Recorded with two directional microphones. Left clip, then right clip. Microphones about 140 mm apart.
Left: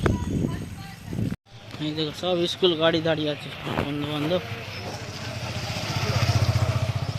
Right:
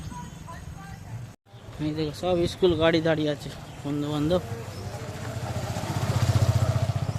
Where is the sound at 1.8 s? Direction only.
10° right (ahead or behind); by 4.4 s 25° right (ahead or behind).